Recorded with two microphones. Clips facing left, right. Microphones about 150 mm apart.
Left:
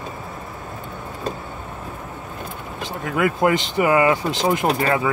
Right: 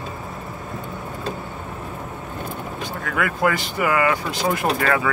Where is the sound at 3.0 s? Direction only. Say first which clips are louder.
Left 3 dB; 25° left (ahead or behind).